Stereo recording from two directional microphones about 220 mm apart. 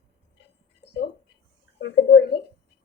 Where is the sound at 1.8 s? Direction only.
50° left (ahead or behind).